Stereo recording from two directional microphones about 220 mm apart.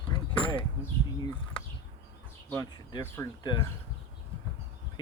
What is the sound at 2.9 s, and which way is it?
Speech, 20° left (ahead or behind).